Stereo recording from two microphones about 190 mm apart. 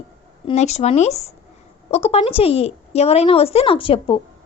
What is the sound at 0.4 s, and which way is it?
A woman's voice, 35° left (ahead or behind).